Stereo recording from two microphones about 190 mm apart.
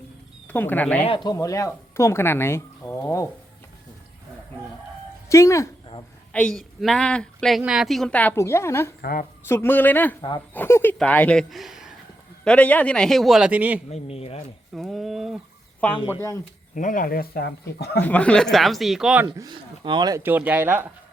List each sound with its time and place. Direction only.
0.4 s speech: 10° left (ahead or behind)
1.0 s speech: 25° left (ahead or behind)
5.3 s speech: 15° left (ahead or behind)
6.3 s a woman's voice: 5° left (ahead or behind)
9.0 s a woman's voice: 50° left (ahead or behind)
9.5 s speech: 10° left (ahead or behind)
10.2 s speech: 25° left (ahead or behind)
10.5 s a woman's voice: 10° left (ahead or behind); by 13.8 s 5° right (ahead or behind)
13.9 s speech: 30° left (ahead or behind)
14.8 s a woman's voice: centre (ahead or behind)
16.7 s speech: 45° left (ahead or behind)
18.0 s a woman's voice: 5° left (ahead or behind)
19.4 s speech: 25° right (ahead or behind)